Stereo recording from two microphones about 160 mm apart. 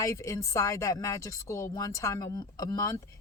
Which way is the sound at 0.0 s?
20° left (ahead or behind).